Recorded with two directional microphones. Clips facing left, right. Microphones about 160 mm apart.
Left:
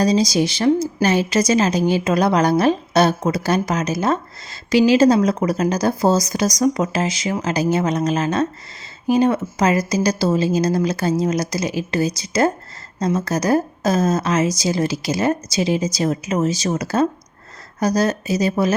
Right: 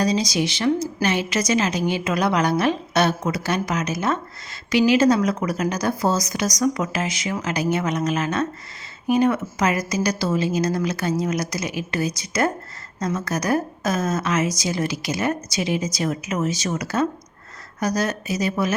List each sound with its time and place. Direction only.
0.0 s a woman's voice: 35° left (ahead or behind)